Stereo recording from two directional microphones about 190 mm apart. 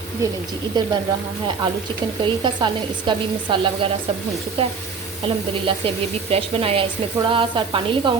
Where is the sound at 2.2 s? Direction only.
25° right (ahead or behind).